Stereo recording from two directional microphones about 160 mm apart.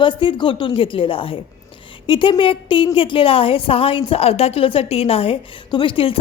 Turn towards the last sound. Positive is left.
turn(degrees=35)  # may be behind; listen again after turning